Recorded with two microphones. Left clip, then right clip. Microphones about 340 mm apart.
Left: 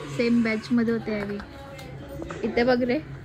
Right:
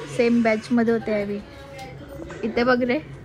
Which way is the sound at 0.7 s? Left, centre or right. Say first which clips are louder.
Right 5 dB; right.